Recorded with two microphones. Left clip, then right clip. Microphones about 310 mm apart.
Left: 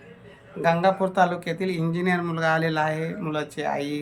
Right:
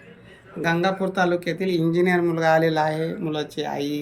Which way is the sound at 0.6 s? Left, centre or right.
Centre.